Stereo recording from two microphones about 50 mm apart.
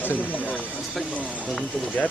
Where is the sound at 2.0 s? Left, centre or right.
Left.